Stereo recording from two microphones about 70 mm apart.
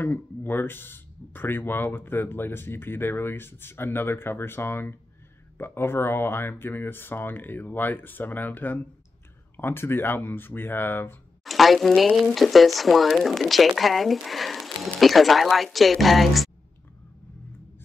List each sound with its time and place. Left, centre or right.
0.0 s speech: left
11.4 s speech: centre